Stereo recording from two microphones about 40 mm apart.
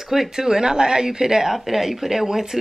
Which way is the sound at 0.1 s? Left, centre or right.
Centre.